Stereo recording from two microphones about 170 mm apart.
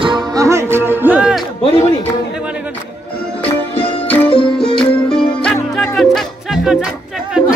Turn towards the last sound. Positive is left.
turn(degrees=0)  # may be behind; listen again after turning